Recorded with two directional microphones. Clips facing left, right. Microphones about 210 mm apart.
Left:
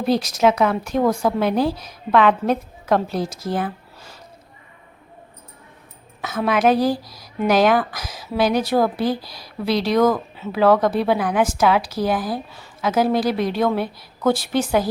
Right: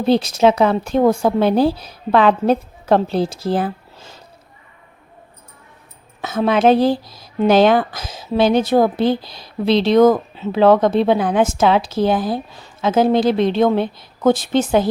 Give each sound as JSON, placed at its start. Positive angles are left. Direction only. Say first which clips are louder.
{"t": 0.0, "sound": "speech", "louder": "right 4 dB", "side_deg": -25}
{"t": 6.2, "sound": "speech", "louder": "right 4 dB", "side_deg": -25}